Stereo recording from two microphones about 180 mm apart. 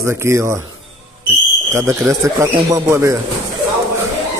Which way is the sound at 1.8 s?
15° right (ahead or behind).